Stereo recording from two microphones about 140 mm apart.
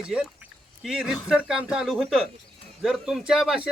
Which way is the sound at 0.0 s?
5° right (ahead or behind).